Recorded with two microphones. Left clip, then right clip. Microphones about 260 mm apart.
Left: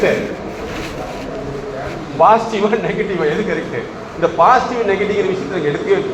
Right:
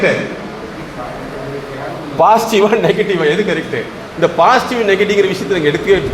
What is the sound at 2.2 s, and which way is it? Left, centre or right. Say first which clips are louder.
Speech: right 2 dB; right.